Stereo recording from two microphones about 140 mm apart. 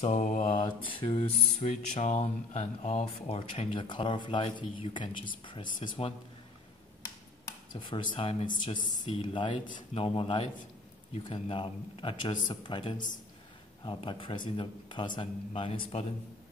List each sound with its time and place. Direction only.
0.0 s mantra: 60° left (ahead or behind)
0.5 s speech: 40° left (ahead or behind)
7.4 s speech: 35° left (ahead or behind)